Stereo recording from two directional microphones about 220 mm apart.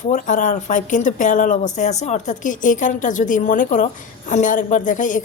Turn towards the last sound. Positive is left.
turn(degrees=35)  # may be behind; listen again after turning